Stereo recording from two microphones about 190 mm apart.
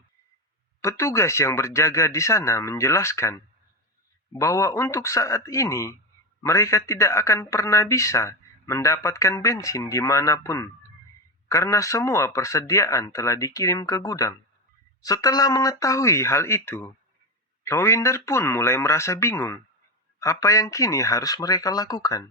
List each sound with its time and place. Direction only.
0.8 s speech: 15° left (ahead or behind)